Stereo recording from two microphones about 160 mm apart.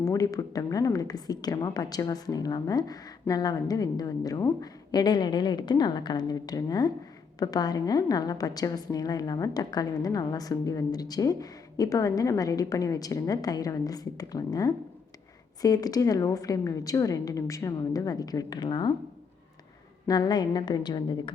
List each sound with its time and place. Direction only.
0.0 s a woman's voice: 20° left (ahead or behind)
20.1 s a woman's voice: 25° left (ahead or behind)